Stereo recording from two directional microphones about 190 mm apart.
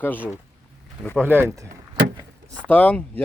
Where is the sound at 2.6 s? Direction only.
5° left (ahead or behind).